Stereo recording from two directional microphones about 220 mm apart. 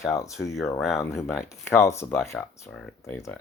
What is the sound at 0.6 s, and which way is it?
Speech, centre (ahead or behind).